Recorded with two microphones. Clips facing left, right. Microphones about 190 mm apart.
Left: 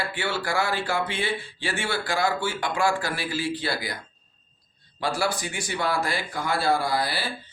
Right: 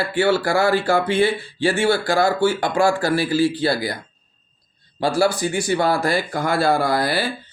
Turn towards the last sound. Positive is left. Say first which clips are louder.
# right 7 dB
turn(degrees=-50)  # may be behind; listen again after turning